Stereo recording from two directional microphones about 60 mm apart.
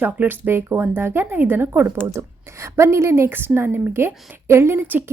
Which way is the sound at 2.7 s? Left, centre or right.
Right.